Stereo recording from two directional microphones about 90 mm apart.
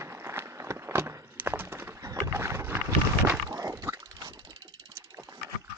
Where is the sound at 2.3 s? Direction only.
30° right (ahead or behind).